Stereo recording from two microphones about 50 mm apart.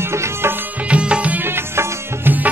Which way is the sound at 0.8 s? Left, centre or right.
Right.